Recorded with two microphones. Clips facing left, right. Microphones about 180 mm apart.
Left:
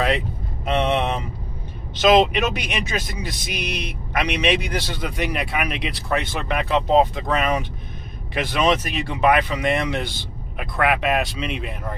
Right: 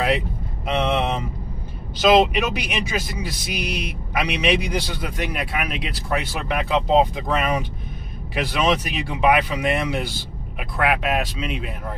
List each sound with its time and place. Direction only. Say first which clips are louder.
0.9 s speech: even; centre (ahead or behind)